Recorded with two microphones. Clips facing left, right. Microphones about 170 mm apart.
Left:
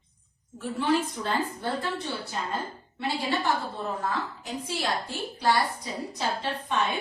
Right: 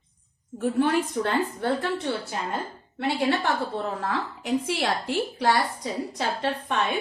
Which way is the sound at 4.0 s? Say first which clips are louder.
Right 2 dB; 70° right (ahead or behind).